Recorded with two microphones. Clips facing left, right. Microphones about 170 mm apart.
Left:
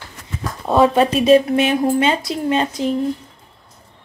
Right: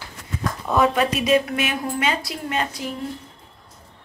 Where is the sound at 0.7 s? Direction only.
30° left (ahead or behind).